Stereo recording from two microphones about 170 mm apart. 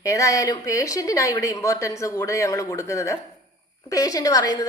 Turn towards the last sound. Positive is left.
turn(degrees=20)  # may be behind; listen again after turning